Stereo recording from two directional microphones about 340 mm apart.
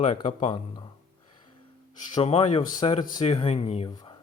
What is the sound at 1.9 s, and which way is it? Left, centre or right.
Speech, centre.